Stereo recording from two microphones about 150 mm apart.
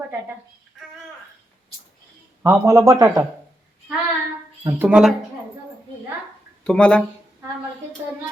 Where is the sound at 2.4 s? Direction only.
20° right (ahead or behind).